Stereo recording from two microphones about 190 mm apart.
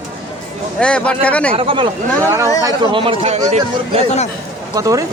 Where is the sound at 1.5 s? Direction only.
25° right (ahead or behind).